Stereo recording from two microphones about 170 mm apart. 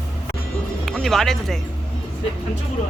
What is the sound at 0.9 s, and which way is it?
Speech, centre (ahead or behind).